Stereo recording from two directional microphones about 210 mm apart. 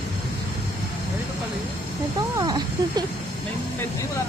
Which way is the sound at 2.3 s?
20° right (ahead or behind).